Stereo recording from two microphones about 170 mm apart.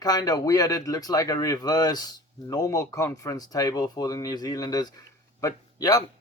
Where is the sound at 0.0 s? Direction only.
20° left (ahead or behind).